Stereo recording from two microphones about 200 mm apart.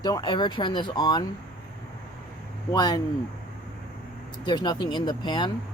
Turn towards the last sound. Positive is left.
turn(degrees=20)  # may be behind; listen again after turning